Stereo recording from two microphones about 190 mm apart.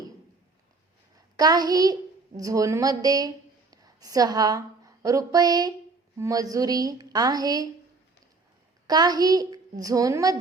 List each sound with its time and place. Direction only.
1.4 s a child's voice: 20° right (ahead or behind)
8.9 s a woman's voice: 20° right (ahead or behind)